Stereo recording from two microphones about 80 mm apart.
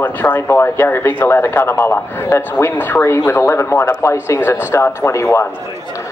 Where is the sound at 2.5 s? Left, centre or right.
Left.